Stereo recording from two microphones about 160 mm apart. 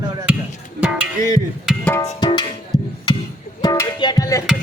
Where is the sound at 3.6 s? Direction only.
25° left (ahead or behind).